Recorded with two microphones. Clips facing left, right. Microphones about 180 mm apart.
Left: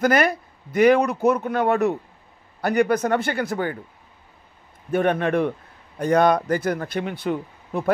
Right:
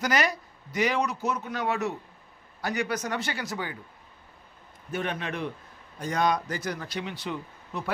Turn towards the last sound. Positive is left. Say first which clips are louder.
# left 11 dB
turn(degrees=50)  # may be behind; listen again after turning